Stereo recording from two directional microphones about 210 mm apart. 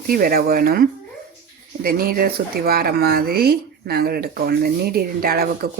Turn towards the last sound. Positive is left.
turn(degrees=-45)  # may be behind; listen again after turning